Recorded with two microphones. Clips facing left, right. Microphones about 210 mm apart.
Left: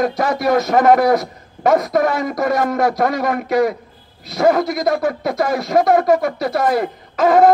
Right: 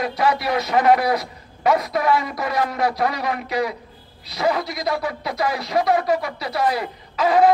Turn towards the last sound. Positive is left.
turn(degrees=50)  # may be behind; listen again after turning